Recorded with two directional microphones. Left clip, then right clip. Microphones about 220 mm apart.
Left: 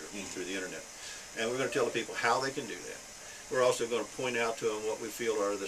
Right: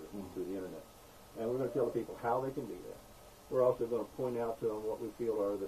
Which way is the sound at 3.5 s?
35° left (ahead or behind).